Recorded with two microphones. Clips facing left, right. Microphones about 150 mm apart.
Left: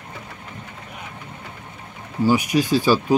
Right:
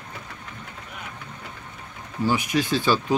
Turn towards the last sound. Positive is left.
turn(degrees=10)  # may be behind; listen again after turning